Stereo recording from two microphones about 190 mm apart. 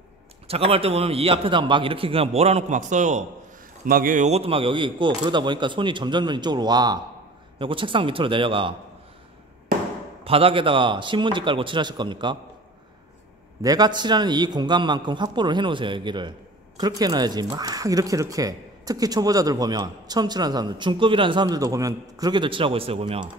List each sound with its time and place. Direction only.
0.5 s a man's voice: 30° right (ahead or behind)
10.2 s a man's voice: 30° right (ahead or behind)
13.6 s a man's voice: 20° right (ahead or behind)